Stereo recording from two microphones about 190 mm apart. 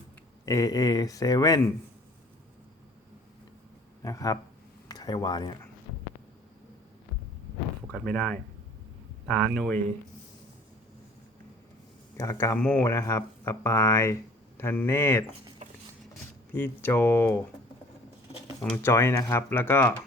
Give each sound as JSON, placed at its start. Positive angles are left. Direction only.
{"t": 0.4, "sound": "speech", "side_deg": 15}
{"t": 4.0, "sound": "speech", "side_deg": 20}
{"t": 7.9, "sound": "speech", "side_deg": 5}
{"t": 12.1, "sound": "speech", "side_deg": 15}
{"t": 16.5, "sound": "speech", "side_deg": 10}
{"t": 18.6, "sound": "speech", "side_deg": 10}